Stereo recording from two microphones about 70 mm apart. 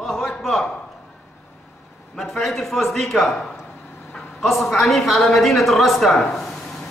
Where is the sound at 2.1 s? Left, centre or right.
Centre.